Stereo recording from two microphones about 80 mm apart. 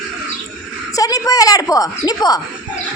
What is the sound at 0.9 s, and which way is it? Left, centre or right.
A woman's voice, left.